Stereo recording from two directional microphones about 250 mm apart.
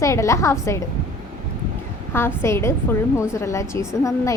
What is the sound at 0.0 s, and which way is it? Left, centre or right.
Speech, centre.